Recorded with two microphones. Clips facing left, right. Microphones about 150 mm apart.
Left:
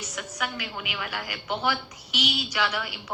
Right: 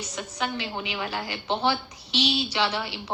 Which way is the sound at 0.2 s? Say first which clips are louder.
Right 3 dB; 25° right (ahead or behind).